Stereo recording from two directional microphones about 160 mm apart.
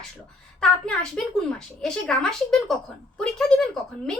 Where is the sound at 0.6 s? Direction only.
5° left (ahead or behind).